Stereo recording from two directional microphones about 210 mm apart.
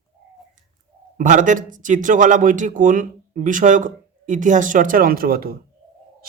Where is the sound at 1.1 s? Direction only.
35° right (ahead or behind).